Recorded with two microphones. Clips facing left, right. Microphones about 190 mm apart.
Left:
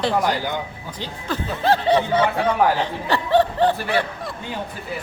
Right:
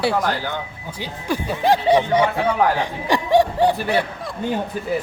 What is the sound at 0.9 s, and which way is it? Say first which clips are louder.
Speech: right 4 dB; 10° right (ahead or behind).